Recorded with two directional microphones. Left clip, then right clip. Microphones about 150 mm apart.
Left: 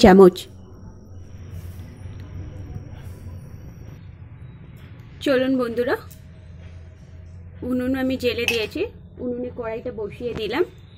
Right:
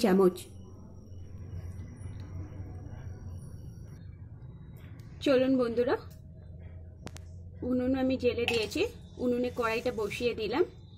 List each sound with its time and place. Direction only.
0.0 s a woman's voice: 40° left (ahead or behind)
5.2 s a woman's voice: 5° right (ahead or behind)
7.6 s speech: 5° right (ahead or behind)
8.5 s speech: 15° right (ahead or behind)